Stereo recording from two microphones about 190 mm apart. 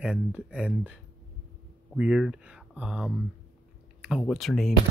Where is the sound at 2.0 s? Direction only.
5° right (ahead or behind).